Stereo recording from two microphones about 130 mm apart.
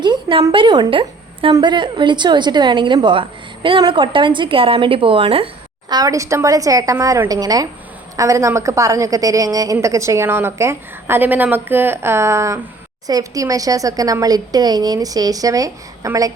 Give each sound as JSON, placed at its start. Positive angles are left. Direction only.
{"t": 0.0, "sound": "a sound", "side_deg": -40}
{"t": 0.5, "sound": "a woman's voice", "side_deg": -35}
{"t": 5.9, "sound": "a woman's voice", "side_deg": -25}